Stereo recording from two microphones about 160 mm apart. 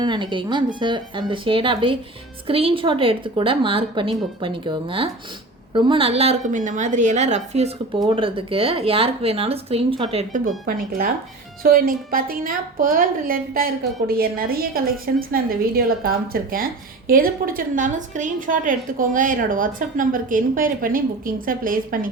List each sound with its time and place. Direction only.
0.0 s a woman's voice: 30° right (ahead or behind); by 7.7 s 45° right (ahead or behind)
7.9 s a woman's voice: 35° right (ahead or behind)
10.7 s a woman's voice: 65° right (ahead or behind)